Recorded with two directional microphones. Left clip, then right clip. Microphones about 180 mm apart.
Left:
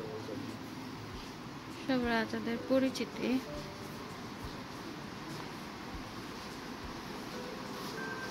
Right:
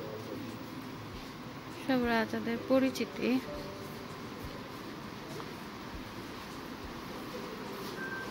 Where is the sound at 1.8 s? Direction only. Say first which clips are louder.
Right 2 dB; 10° right (ahead or behind).